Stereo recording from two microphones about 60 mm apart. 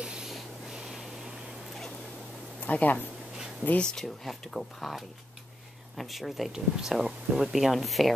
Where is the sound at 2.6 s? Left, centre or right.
Left.